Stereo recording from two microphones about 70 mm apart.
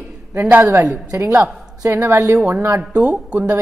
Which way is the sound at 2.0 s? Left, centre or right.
Right.